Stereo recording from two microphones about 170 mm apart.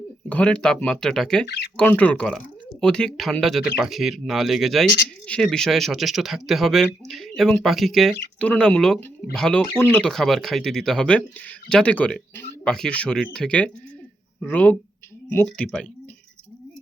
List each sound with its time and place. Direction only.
0.3 s speech: 10° left (ahead or behind)
1.5 s speech: 80° left
1.7 s speech: 10° left (ahead or behind)